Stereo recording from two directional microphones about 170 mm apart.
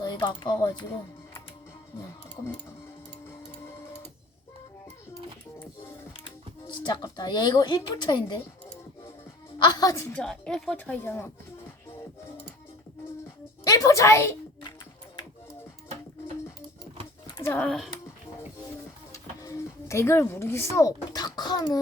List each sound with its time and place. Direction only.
0.0 s speech: 25° left (ahead or behind)
6.2 s speech: 25° left (ahead or behind)
9.6 s a woman's voice: 20° left (ahead or behind)
10.2 s speech: 5° left (ahead or behind)
13.7 s a woman's voice: 20° left (ahead or behind)
17.3 s speech: 15° left (ahead or behind)
19.1 s a sound: 20° left (ahead or behind)